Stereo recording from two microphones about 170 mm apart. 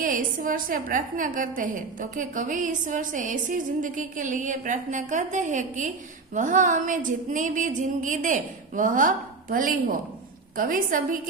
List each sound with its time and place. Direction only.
0.0 s a woman's voice: 55° right (ahead or behind)